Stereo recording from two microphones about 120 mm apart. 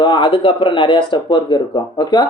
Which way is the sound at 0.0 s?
40° left (ahead or behind).